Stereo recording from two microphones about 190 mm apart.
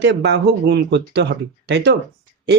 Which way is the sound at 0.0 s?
65° right (ahead or behind).